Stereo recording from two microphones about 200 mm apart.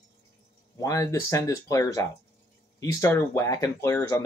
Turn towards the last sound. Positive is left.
turn(degrees=15)  # may be behind; listen again after turning